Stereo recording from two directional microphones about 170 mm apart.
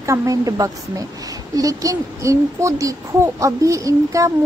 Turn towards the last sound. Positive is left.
turn(degrees=-20)  # may be behind; listen again after turning